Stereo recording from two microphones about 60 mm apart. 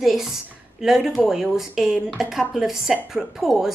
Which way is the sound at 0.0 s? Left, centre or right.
Centre.